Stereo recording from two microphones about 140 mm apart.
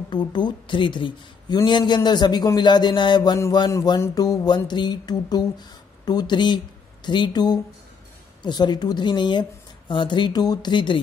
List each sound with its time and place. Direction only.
0.1 s speech: 30° left (ahead or behind)
3.7 s music: 25° left (ahead or behind)
6.0 s speech: 30° left (ahead or behind)